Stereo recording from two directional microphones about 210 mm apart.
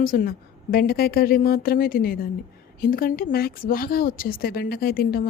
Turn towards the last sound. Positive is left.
turn(degrees=45)  # may be behind; listen again after turning